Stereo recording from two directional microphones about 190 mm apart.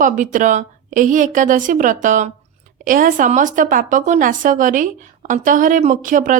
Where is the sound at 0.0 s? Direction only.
45° right (ahead or behind).